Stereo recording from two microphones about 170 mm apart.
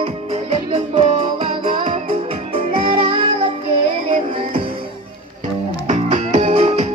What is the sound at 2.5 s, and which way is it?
Music, 30° right (ahead or behind).